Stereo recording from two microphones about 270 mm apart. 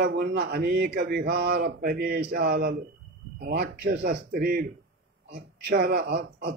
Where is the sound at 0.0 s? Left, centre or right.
Right.